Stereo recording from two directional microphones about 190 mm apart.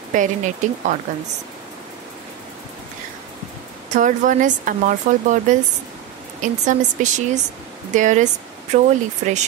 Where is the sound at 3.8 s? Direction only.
40° right (ahead or behind).